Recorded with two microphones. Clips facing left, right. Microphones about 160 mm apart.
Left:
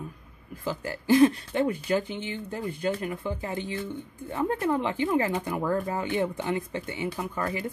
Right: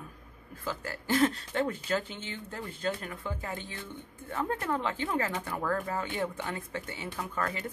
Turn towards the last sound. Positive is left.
turn(degrees=15)  # may be behind; listen again after turning